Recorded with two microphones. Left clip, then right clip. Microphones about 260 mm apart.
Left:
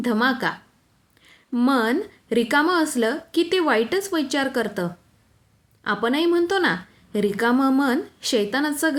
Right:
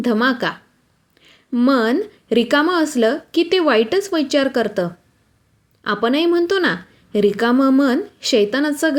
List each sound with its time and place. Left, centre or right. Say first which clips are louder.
0.0 s a woman's voice: right 4 dB; centre